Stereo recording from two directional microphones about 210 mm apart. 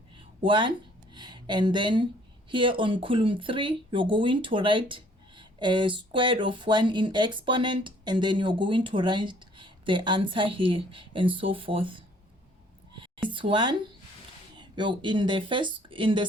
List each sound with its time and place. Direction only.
0.4 s speech: 20° right (ahead or behind)
13.2 s speech: 25° right (ahead or behind)